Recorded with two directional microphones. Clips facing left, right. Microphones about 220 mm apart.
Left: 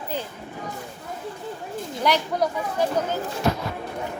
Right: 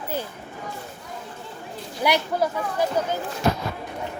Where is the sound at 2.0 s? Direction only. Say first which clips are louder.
Even; 10° right (ahead or behind).